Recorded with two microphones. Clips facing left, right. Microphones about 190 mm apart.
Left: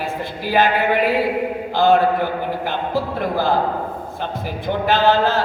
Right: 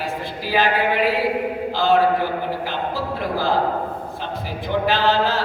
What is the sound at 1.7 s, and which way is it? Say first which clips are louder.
Mantra: left 4 dB; 55° left (ahead or behind).